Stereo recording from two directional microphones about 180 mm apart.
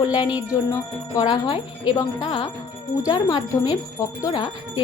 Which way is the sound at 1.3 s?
25° left (ahead or behind).